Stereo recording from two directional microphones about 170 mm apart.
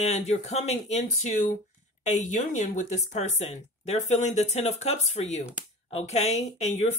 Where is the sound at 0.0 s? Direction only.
40° left (ahead or behind).